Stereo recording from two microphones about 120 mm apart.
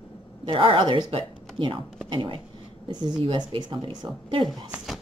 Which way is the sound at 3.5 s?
45° right (ahead or behind).